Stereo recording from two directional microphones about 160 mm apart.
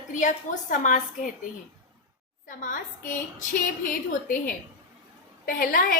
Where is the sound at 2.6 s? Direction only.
55° left (ahead or behind).